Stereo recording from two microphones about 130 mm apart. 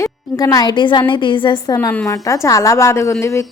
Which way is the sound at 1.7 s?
15° left (ahead or behind).